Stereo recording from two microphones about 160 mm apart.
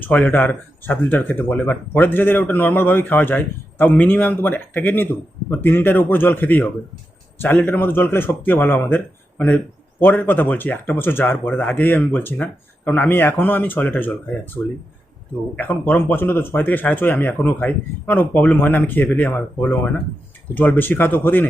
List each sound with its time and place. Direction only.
0.0 s speech: 10° left (ahead or behind)
10.1 s speech: 10° left (ahead or behind)
15.5 s speech: 10° left (ahead or behind)